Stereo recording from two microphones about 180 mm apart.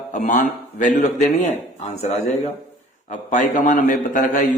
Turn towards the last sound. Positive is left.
turn(degrees=45)  # may be behind; listen again after turning